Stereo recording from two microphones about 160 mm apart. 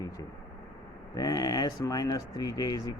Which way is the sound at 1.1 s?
25° left (ahead or behind).